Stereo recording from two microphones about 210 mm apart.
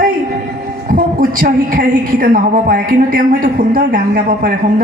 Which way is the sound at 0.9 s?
40° right (ahead or behind).